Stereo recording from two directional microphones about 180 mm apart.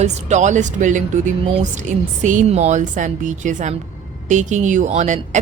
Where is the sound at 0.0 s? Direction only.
40° right (ahead or behind).